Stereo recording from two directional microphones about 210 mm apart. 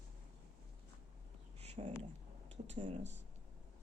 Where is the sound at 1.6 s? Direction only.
30° right (ahead or behind).